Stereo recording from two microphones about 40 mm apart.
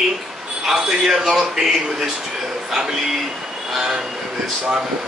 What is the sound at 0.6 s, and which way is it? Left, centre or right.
Speech, centre.